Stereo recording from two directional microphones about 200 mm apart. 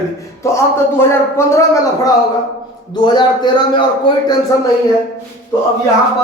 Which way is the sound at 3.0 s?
20° left (ahead or behind).